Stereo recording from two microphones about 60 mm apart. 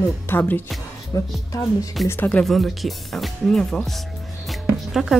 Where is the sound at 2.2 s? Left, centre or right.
Left.